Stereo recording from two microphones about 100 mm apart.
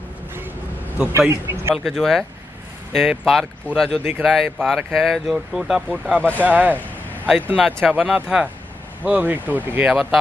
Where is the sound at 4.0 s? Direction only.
15° right (ahead or behind).